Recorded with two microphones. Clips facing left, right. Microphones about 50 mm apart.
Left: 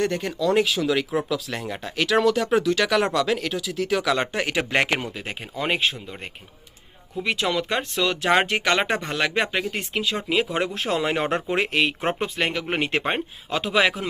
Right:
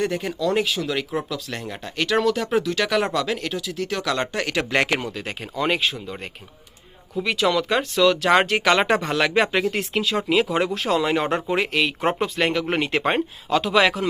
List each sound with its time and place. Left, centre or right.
0.0 s speech: centre
7.4 s speech: centre
7.9 s speech: centre
10.8 s speech: left
11.9 s speech: centre
13.5 s speech: centre